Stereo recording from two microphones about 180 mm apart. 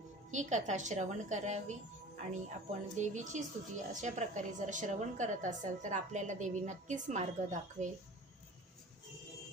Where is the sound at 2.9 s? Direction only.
40° right (ahead or behind).